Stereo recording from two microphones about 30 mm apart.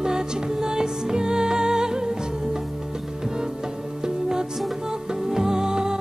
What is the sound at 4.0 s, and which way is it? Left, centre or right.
Music, right.